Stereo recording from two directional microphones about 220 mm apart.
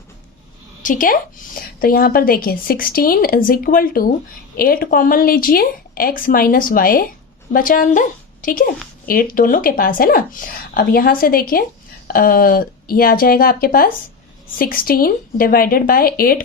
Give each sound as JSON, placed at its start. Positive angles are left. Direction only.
{"t": 0.8, "sound": "speech", "side_deg": 35}